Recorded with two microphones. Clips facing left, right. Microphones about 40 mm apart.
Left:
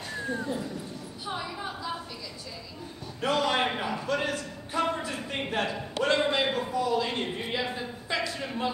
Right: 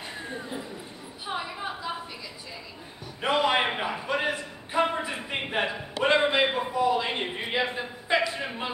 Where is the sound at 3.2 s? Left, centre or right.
Right.